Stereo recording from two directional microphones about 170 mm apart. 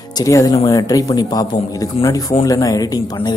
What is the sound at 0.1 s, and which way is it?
Speech, 20° left (ahead or behind).